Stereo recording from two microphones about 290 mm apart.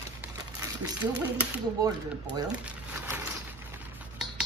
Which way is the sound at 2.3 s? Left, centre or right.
Centre.